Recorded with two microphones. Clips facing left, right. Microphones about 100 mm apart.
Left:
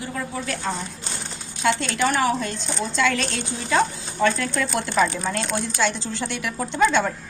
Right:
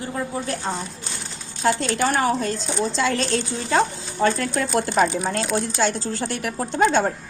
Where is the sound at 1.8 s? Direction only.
40° right (ahead or behind).